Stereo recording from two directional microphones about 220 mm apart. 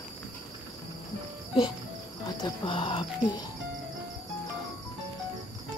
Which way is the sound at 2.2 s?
20° left (ahead or behind).